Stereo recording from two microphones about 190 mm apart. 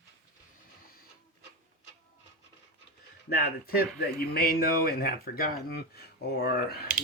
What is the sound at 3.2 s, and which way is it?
Speech, 55° left (ahead or behind).